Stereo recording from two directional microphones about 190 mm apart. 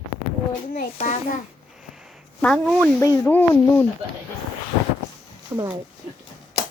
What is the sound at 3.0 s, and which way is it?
Speech, 15° left (ahead or behind).